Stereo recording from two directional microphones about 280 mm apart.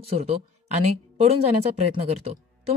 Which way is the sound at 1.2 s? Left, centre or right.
Right.